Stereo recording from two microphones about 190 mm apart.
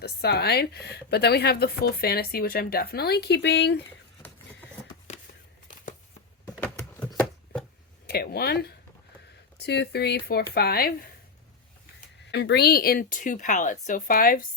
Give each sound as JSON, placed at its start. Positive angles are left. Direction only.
{"t": 0.0, "sound": "speech", "side_deg": 55}
{"t": 6.4, "sound": "a sound", "side_deg": 10}
{"t": 8.0, "sound": "speech", "side_deg": 55}
{"t": 11.9, "sound": "speech", "side_deg": 60}